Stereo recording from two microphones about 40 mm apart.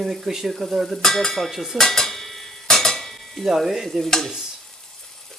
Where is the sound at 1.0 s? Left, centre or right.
Centre.